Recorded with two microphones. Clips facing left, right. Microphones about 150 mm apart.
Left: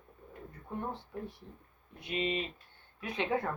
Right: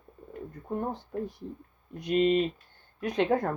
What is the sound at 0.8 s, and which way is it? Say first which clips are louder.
Speech: right 5 dB; 40° right (ahead or behind).